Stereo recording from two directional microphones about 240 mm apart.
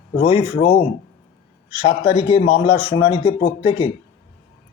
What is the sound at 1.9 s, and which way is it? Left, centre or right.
Speech, left.